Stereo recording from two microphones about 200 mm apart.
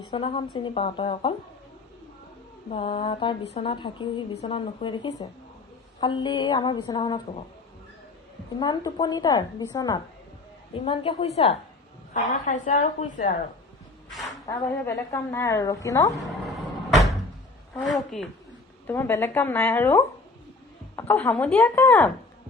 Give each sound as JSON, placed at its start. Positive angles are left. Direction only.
{"t": 0.0, "sound": "a woman's voice", "side_deg": 25}
{"t": 2.6, "sound": "a woman's voice", "side_deg": 25}
{"t": 8.5, "sound": "a woman's voice", "side_deg": 20}
{"t": 14.4, "sound": "a woman's voice", "side_deg": 15}
{"t": 17.7, "sound": "a woman's voice", "side_deg": 0}
{"t": 18.9, "sound": "a woman's voice", "side_deg": 10}